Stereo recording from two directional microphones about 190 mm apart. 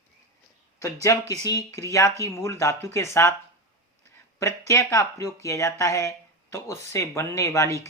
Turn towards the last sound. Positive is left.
turn(degrees=15)  # may be behind; listen again after turning